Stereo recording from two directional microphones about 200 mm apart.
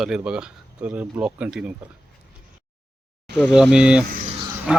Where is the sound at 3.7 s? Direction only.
5° right (ahead or behind).